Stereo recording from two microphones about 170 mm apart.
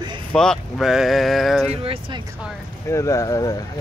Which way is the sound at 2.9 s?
20° left (ahead or behind).